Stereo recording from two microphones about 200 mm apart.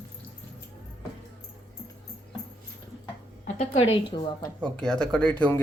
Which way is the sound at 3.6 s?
35° left (ahead or behind).